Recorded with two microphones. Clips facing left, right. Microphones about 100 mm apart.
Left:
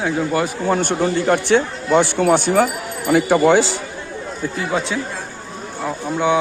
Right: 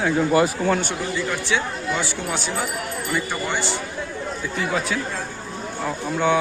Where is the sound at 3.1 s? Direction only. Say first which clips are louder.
Left 14 dB; 85° left.